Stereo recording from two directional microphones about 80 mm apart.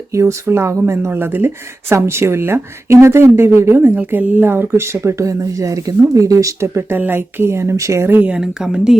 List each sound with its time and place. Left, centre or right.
0.1 s speech: right
8.3 s a woman's voice: centre